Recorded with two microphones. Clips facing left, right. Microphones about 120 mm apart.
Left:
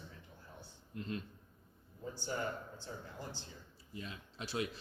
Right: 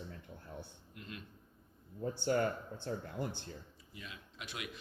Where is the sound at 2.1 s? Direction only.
60° right (ahead or behind).